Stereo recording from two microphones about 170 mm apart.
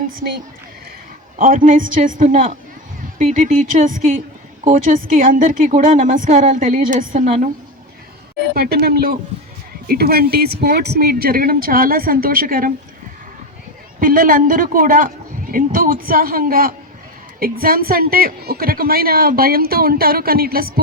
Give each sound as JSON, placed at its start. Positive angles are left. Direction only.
{"t": 1.4, "sound": "a woman's voice", "side_deg": -50}
{"t": 8.5, "sound": "a woman's voice", "side_deg": -65}
{"t": 14.0, "sound": "a woman's voice", "side_deg": -55}